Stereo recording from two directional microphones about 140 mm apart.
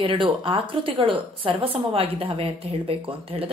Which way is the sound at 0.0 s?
40° right (ahead or behind).